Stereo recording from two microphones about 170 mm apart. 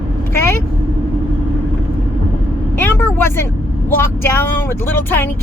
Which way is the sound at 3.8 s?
15° left (ahead or behind).